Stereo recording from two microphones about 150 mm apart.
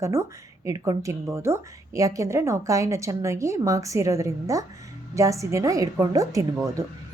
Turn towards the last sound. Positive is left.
turn(degrees=-20)  # may be behind; listen again after turning